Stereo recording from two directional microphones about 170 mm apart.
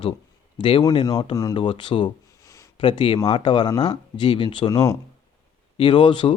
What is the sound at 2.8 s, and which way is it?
Speech, 30° left (ahead or behind).